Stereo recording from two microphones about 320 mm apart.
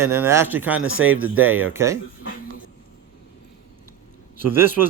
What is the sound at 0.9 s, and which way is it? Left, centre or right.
Speech, right.